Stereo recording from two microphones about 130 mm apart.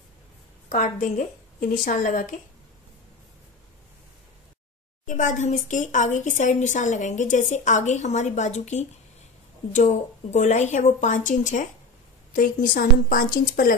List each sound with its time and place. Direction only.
0.7 s a woman's voice: 85° left
5.0 s speech: 75° left (ahead or behind)
12.4 s a woman's voice: 90° left